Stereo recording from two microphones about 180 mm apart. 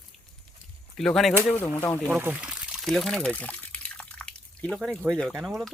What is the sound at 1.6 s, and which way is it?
Speech, 10° left (ahead or behind).